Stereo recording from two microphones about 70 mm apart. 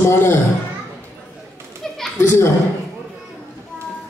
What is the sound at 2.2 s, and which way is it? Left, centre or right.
Speech, left.